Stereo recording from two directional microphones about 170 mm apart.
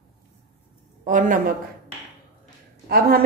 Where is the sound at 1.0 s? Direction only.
50° right (ahead or behind).